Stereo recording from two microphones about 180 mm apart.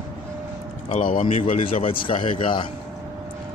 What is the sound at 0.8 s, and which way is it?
Speech, 45° left (ahead or behind).